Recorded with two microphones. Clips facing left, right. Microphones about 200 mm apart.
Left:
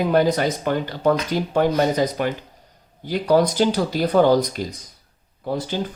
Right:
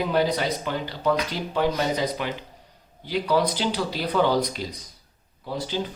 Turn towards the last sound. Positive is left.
turn(degrees=50)  # may be behind; listen again after turning